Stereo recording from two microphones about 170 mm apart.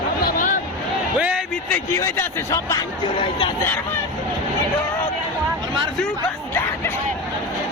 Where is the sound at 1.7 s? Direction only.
15° left (ahead or behind).